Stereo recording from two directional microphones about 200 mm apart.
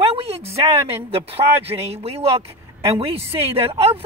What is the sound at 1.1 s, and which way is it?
A man's voice, 30° right (ahead or behind).